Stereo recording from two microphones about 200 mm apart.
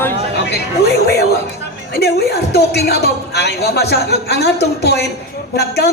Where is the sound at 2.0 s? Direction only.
55° left (ahead or behind).